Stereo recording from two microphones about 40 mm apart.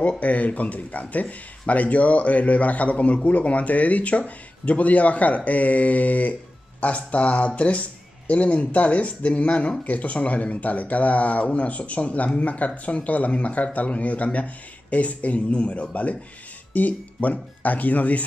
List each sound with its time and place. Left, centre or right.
0.2 s speech: left